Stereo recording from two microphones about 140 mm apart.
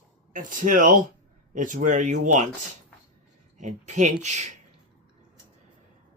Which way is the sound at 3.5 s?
60° right (ahead or behind).